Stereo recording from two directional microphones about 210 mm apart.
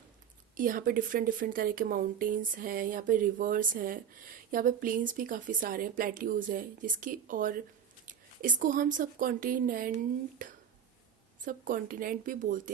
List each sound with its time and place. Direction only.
0.5 s a woman's voice: 40° right (ahead or behind)